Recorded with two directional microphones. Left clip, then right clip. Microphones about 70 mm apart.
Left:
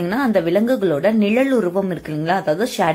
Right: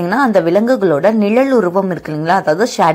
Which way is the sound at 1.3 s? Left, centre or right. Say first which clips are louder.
Right 5 dB; right.